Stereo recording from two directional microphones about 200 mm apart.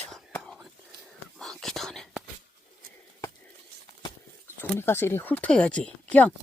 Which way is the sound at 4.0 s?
10° left (ahead or behind).